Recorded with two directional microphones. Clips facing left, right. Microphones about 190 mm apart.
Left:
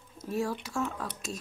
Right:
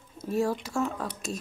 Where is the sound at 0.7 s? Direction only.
10° right (ahead or behind).